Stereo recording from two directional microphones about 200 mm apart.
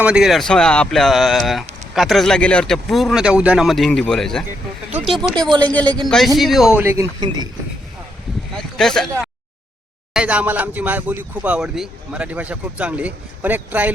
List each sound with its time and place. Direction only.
0.0 s speech: 5° right (ahead or behind)
8.8 s speech: centre (ahead or behind)
10.2 s speech: 5° right (ahead or behind)